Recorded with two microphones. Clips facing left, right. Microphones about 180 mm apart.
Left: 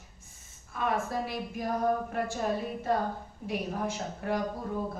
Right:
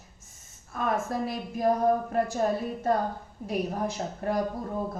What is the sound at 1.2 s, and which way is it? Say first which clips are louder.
Speech: right 7 dB; 40° right (ahead or behind).